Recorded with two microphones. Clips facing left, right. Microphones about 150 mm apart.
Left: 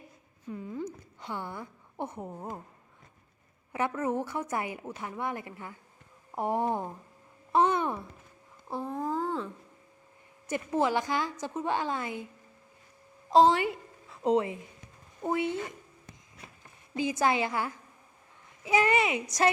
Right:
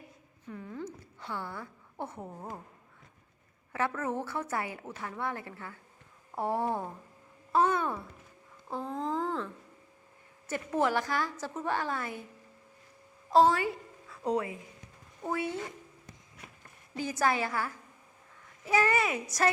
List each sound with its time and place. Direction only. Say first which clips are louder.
0.4 s a sound: left 4 dB; 15° left (ahead or behind)
3.7 s a woman's voice: left 2 dB; 15° left (ahead or behind)
13.3 s a woman's voice: left 2 dB; 20° left (ahead or behind)
17.0 s a woman's voice: left 2 dB; 20° left (ahead or behind)